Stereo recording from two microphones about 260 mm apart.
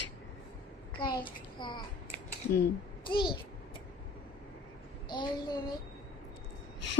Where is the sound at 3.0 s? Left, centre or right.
Centre.